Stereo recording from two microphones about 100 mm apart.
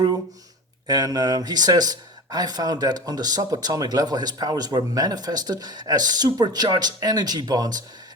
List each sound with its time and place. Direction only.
0.9 s speech: 40° right (ahead or behind)